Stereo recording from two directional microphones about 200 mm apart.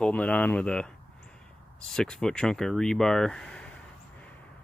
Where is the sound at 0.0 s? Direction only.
5° left (ahead or behind).